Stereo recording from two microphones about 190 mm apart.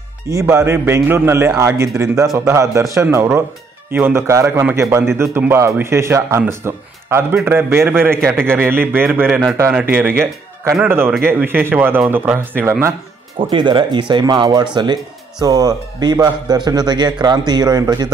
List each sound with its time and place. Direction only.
0.3 s a man's voice: 15° right (ahead or behind)
13.4 s a man's voice: 25° right (ahead or behind)